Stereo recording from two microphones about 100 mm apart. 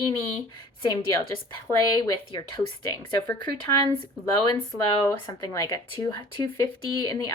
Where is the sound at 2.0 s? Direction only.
45° left (ahead or behind).